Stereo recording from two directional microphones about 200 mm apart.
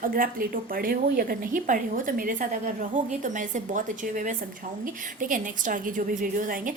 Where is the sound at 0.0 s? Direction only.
45° right (ahead or behind).